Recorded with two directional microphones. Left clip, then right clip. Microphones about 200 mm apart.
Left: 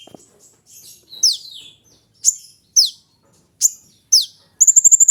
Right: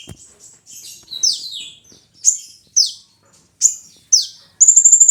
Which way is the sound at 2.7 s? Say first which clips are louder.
Left 1 dB; 40° left (ahead or behind).